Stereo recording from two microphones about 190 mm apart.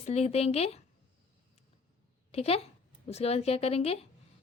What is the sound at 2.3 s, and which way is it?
Speech, 30° left (ahead or behind).